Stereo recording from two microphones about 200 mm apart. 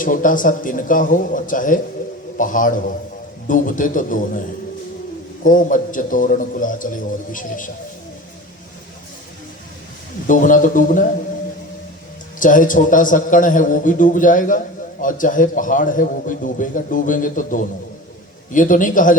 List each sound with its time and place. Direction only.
0.0 s a man's voice: 40° left (ahead or behind)
10.2 s a man's voice: 40° left (ahead or behind)
12.4 s a man's voice: 40° left (ahead or behind)